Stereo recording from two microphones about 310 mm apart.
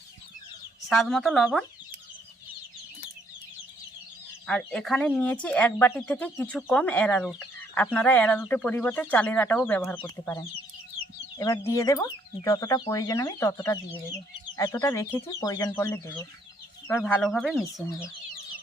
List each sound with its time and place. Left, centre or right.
0.9 s speech: centre
4.4 s speech: centre